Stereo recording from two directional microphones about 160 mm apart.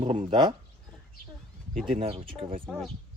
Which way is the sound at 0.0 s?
40° right (ahead or behind).